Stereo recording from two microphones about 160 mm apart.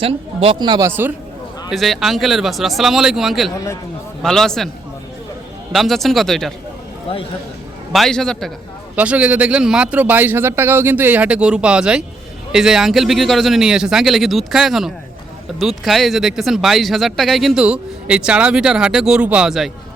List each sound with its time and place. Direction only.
0.0 s speech: 35° right (ahead or behind)
0.9 s a man's voice: 15° right (ahead or behind)
1.7 s speech: centre (ahead or behind)
5.7 s speech: centre (ahead or behind)
7.9 s speech: centre (ahead or behind)
9.0 s a man's voice: 10° right (ahead or behind)